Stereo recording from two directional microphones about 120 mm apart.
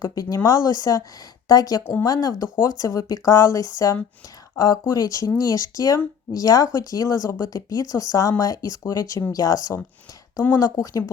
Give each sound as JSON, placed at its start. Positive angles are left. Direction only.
{"t": 0.0, "sound": "speech", "side_deg": 30}
{"t": 1.8, "sound": "speech", "side_deg": 15}
{"t": 2.0, "sound": "speech", "side_deg": 30}